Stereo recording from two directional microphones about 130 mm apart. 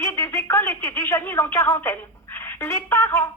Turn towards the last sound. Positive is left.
turn(degrees=15)  # may be behind; listen again after turning